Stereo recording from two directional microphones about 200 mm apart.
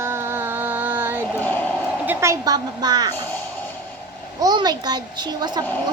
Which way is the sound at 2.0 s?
10° right (ahead or behind).